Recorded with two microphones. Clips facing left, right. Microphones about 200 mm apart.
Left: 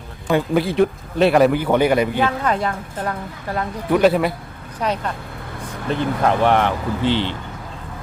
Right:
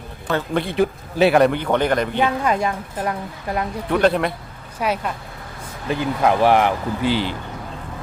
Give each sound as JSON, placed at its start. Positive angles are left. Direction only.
{"t": 0.3, "sound": "a man's voice", "side_deg": 15}
{"t": 0.6, "sound": "speech", "side_deg": 0}
{"t": 2.2, "sound": "a woman's voice", "side_deg": -15}
{"t": 3.9, "sound": "speech", "side_deg": 5}
{"t": 4.8, "sound": "a woman's voice", "side_deg": -10}